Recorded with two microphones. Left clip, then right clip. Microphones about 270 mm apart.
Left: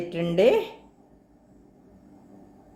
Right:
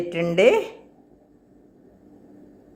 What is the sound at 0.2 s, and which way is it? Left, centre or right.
Speech, centre.